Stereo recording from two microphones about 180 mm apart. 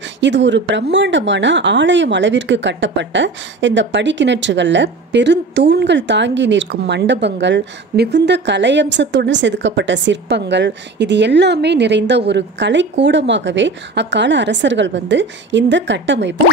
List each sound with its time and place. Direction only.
0.2 s speech: 85° right